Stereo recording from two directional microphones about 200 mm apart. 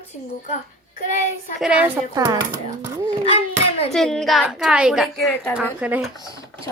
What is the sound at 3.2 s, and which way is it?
Speech, 30° left (ahead or behind).